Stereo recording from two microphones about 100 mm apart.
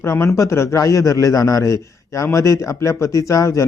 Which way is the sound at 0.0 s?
25° left (ahead or behind).